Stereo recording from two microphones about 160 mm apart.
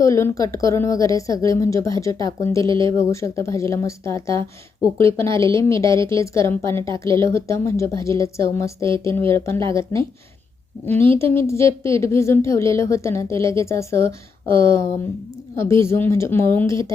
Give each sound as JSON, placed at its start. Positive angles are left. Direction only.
{"t": 0.0, "sound": "a woman's voice", "side_deg": 20}